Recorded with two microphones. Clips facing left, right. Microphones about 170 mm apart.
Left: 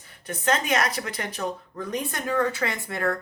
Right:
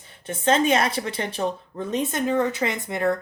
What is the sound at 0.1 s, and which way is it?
Speech, 25° right (ahead or behind).